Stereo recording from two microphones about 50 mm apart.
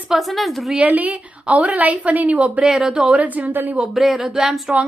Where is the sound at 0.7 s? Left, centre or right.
Right.